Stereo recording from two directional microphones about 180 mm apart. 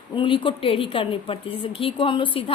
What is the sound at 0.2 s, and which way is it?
Speech, 30° left (ahead or behind).